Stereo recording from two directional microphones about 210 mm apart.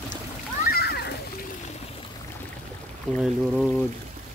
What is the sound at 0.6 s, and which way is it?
Splash, 50° left (ahead or behind).